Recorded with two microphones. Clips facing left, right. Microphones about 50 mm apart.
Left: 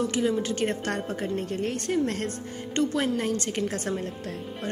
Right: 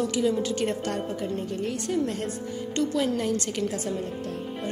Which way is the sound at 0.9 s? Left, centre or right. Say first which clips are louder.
Even; left.